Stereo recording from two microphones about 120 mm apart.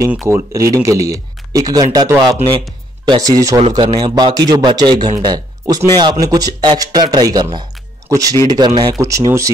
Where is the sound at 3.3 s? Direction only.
30° right (ahead or behind).